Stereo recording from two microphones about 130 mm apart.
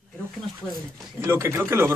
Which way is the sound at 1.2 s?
20° right (ahead or behind).